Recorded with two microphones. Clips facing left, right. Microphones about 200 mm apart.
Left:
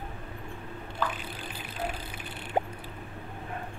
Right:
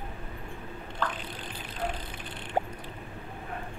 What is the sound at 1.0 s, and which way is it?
Vehicle, 10° left (ahead or behind).